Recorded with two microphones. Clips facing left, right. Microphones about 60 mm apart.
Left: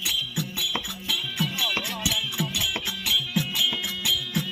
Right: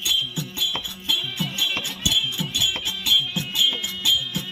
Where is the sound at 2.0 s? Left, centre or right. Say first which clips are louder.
Right 2 dB; left.